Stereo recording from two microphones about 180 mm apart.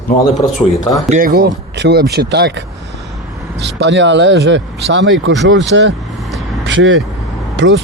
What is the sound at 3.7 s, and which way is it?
Speech, 85° right.